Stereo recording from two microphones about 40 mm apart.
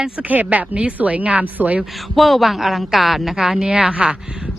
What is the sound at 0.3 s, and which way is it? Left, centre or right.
Speech, right.